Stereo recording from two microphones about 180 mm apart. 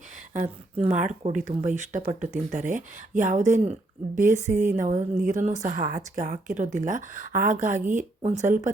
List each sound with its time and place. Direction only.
0.8 s speech: 40° right (ahead or behind)